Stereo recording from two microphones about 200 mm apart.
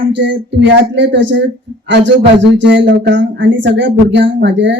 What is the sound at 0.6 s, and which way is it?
Speech, 65° right (ahead or behind).